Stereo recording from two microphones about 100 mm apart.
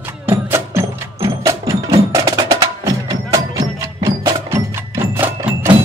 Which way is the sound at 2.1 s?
40° right (ahead or behind).